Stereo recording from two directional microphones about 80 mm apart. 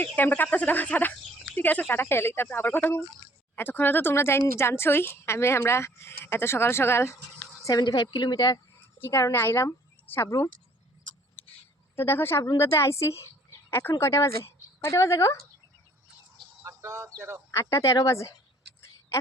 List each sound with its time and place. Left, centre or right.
0.0 s a woman's voice: left
7.6 s a woman's voice: left
9.0 s speech: left
11.9 s a woman's voice: left
16.6 s speech: right
17.5 s a woman's voice: left